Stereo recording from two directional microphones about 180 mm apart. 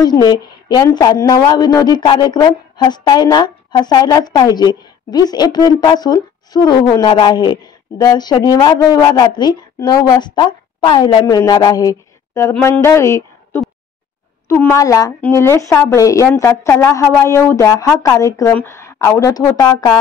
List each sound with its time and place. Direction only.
0.0 s a woman's voice: 25° left (ahead or behind)